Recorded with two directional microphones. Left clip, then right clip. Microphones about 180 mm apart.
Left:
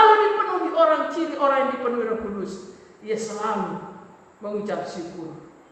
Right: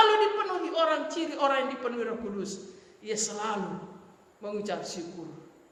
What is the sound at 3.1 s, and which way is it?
Speech, 50° right (ahead or behind).